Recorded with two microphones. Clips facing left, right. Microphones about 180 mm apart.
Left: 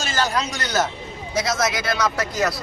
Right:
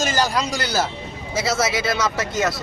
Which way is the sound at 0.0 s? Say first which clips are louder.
Right 3 dB; 40° right (ahead or behind).